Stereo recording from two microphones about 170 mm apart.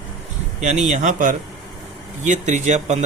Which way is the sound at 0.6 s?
45° right (ahead or behind).